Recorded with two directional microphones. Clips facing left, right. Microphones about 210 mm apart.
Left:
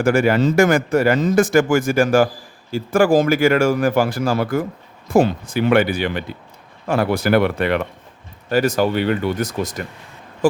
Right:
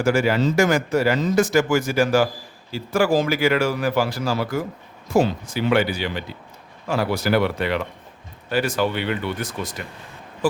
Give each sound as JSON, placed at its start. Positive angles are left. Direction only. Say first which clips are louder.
{"t": 0.0, "sound": "speech", "louder": "left 3 dB", "side_deg": 55}
{"t": 8.4, "sound": "speech", "louder": "left 5 dB", "side_deg": 40}